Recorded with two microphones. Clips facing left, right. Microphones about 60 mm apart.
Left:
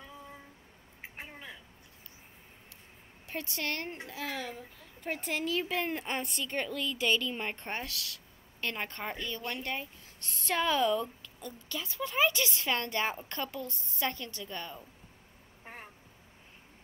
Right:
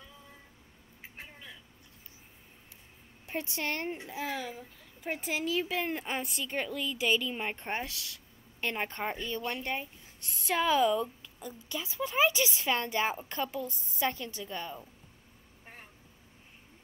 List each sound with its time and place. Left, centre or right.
1.1 s a sound: left
3.3 s a woman's voice: right
4.4 s a woman's voice: centre; by 9.8 s right
10.2 s a woman's voice: centre
15.6 s vehicle: left